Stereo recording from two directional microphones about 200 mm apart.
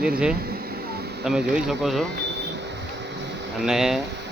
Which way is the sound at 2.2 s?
60° right (ahead or behind).